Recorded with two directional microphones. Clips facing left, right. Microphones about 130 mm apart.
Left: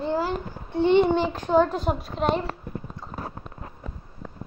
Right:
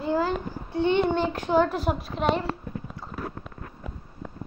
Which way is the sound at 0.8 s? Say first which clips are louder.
Left 3 dB; 5° left (ahead or behind).